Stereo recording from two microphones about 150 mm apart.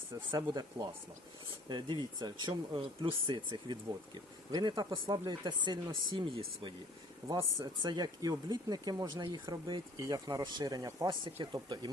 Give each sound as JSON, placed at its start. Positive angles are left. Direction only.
{"t": 0.3, "sound": "speech", "side_deg": -30}